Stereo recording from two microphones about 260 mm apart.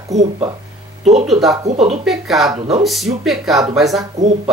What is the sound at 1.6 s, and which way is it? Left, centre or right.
Speech, right.